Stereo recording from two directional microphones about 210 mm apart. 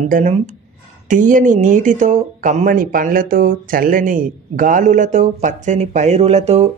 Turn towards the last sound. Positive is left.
turn(degrees=-30)  # may be behind; listen again after turning